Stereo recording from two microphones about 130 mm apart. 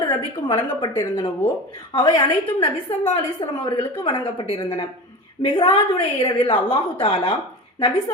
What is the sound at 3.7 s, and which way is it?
A woman's voice, 40° left (ahead or behind).